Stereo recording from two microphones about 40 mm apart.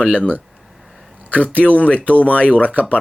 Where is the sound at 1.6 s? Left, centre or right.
Left.